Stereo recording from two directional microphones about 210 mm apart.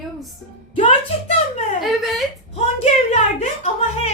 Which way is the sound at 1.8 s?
Centre (ahead or behind).